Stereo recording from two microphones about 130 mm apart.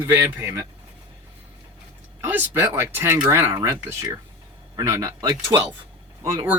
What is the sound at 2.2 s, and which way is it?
Speech, 15° right (ahead or behind).